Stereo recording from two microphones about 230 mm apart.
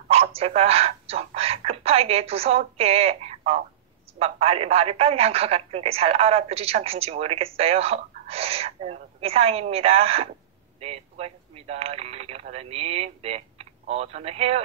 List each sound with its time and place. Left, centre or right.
0.1 s a woman's voice: right